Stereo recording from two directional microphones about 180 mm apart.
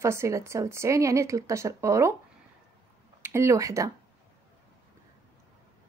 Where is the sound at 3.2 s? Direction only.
15° right (ahead or behind).